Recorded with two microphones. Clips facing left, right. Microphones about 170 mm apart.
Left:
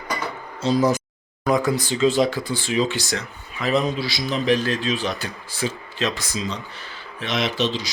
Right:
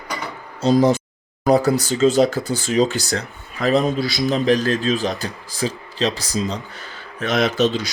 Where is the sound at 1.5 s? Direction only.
40° right (ahead or behind).